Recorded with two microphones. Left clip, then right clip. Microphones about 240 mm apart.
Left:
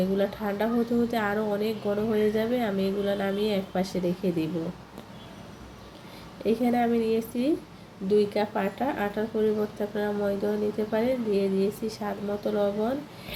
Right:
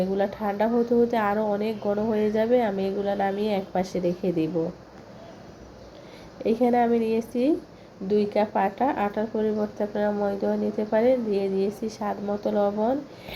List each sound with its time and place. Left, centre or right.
0.0 s a woman's voice: centre
6.4 s speech: centre